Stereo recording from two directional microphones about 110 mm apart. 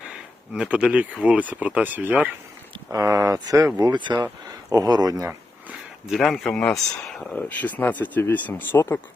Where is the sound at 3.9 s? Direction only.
40° right (ahead or behind).